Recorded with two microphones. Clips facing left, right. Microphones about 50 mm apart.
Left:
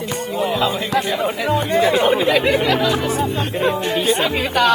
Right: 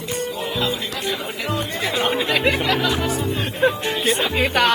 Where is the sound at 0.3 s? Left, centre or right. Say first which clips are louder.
Left 9 dB; centre.